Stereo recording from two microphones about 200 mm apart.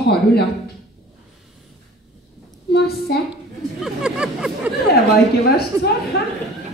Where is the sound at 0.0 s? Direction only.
55° left (ahead or behind).